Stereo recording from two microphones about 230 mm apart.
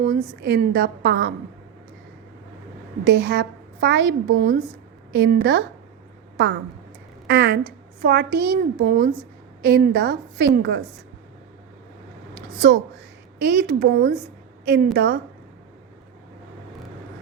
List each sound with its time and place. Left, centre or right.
0.0 s a woman's voice: right
3.0 s a woman's voice: right
12.3 s a sound: right
13.4 s a woman's voice: right